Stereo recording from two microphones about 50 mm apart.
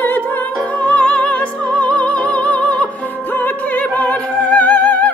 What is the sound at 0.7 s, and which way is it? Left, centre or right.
Music, left.